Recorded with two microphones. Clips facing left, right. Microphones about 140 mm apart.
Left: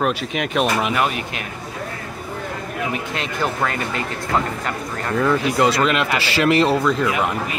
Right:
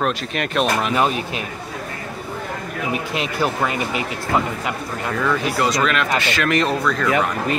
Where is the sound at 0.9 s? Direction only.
25° right (ahead or behind).